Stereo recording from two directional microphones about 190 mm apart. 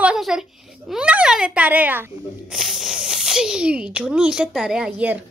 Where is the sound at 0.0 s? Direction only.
5° right (ahead or behind).